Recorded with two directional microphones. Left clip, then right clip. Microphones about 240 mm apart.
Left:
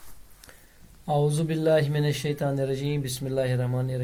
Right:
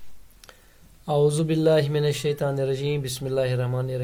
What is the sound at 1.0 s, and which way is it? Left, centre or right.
Speech, right.